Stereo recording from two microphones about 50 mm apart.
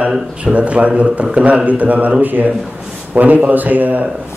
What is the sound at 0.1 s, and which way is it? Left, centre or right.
Speech, right.